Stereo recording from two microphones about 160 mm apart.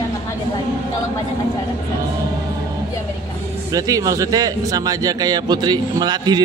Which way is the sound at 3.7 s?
20° right (ahead or behind).